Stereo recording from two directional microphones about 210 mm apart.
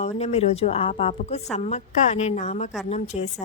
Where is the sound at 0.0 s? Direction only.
30° left (ahead or behind).